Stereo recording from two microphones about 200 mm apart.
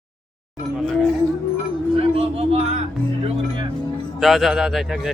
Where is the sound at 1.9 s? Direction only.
30° right (ahead or behind).